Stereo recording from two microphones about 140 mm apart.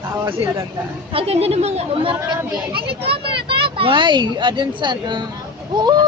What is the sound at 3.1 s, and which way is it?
A woman's voice, 40° right (ahead or behind).